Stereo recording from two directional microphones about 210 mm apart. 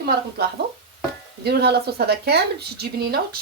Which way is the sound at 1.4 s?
50° right (ahead or behind).